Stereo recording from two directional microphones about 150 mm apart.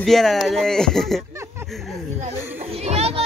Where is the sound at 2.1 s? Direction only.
45° right (ahead or behind).